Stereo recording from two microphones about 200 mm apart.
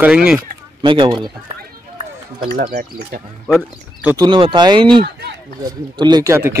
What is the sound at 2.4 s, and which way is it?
Speech, 55° right (ahead or behind).